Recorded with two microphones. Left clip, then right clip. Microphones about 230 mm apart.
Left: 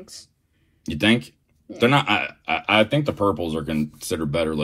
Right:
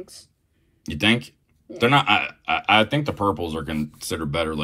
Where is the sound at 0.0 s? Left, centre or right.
Left.